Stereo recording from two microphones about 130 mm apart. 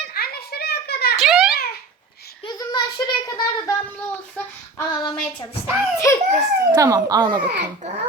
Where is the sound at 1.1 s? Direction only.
5° right (ahead or behind).